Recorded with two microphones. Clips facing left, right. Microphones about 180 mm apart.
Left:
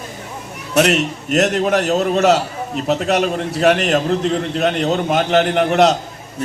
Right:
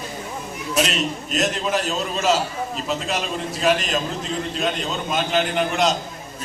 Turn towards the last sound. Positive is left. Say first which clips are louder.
# left 7 dB
turn(degrees=70)  # may be behind; listen again after turning